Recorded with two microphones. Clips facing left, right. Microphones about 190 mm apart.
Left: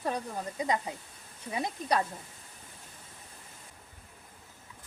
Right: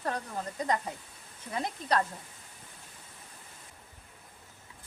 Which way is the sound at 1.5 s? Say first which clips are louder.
Even; 10° left (ahead or behind).